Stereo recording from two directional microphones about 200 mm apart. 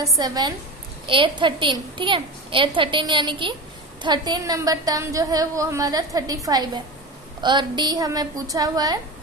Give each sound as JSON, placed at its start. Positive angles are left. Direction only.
{"t": 0.2, "sound": "a woman's voice", "side_deg": -20}